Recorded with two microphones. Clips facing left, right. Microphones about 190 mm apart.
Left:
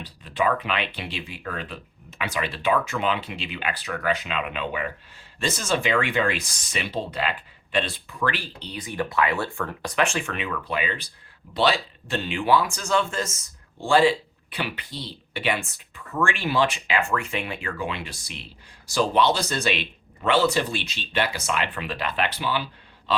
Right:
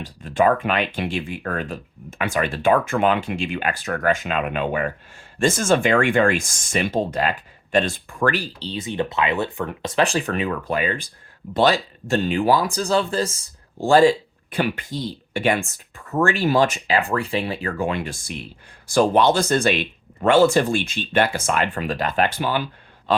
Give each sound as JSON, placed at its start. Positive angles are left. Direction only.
{"t": 0.0, "sound": "speech", "side_deg": -45}